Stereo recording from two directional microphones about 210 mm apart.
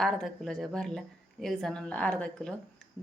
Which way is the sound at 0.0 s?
Centre (ahead or behind).